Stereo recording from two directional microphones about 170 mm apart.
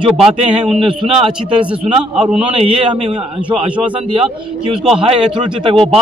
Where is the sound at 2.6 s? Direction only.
35° right (ahead or behind).